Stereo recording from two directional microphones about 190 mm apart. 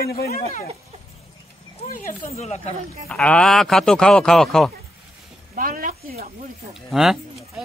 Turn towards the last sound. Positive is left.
turn(degrees=0)  # may be behind; listen again after turning